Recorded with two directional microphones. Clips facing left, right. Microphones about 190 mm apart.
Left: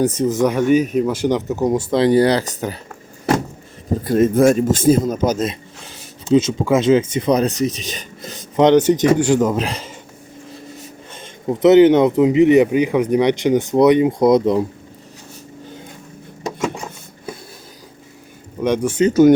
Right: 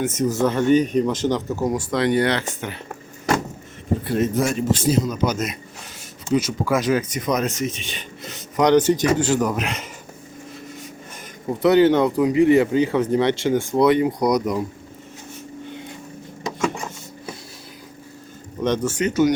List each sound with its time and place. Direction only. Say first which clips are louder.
0.0 s speech: left 5 dB; 35° left (ahead or behind)
0.3 s speech: even; 15° left (ahead or behind); by 2.7 s 40° left (ahead or behind)
4.0 s speech: left 9 dB; 45° left (ahead or behind)
6.2 s speech: left 6 dB; 25° left (ahead or behind); by 8.4 s 40° left (ahead or behind)
8.5 s speech: left 4 dB; 20° left (ahead or behind)
9.6 s speech: left 2 dB; 35° left (ahead or behind)
11.2 s speech: left 5 dB; 20° left (ahead or behind)
18.6 s speech: left 3 dB; 10° left (ahead or behind)